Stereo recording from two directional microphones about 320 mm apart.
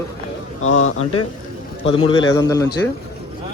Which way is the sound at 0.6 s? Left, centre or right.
Left.